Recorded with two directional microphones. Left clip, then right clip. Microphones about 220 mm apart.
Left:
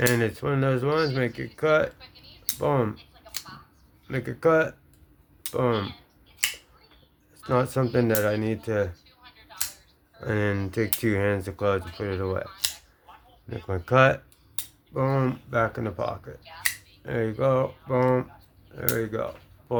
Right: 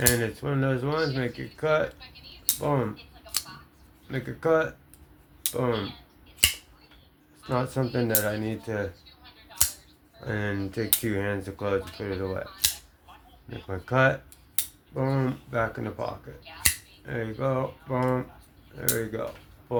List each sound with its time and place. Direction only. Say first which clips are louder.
0.0 s speech: left 2 dB; 50° left (ahead or behind)
4.1 s speech: left 3 dB; 50° left (ahead or behind)
7.4 s speech: left 4 dB; 50° left (ahead or behind)
10.2 s speech: left 4 dB; 50° left (ahead or behind)
13.5 s speech: left 5 dB; 50° left (ahead or behind)